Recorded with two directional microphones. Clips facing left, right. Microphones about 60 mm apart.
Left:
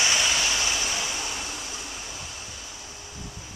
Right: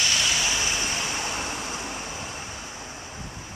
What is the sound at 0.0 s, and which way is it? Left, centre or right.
Vehicle, centre.